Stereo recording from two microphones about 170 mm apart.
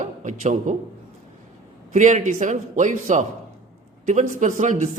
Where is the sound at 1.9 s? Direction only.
45° right (ahead or behind).